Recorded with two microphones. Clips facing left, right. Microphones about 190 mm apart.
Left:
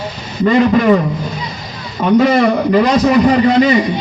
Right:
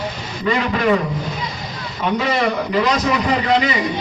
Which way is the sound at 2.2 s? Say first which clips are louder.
Left 9 dB; 45° left (ahead or behind).